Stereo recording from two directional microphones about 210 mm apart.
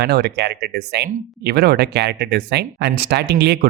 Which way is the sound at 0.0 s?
50° right (ahead or behind).